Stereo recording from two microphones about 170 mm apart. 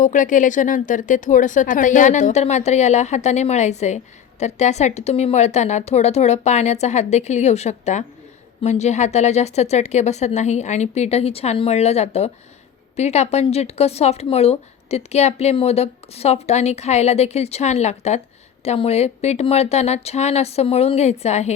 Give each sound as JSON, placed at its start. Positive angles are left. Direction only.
{"t": 0.0, "sound": "speech", "side_deg": 50}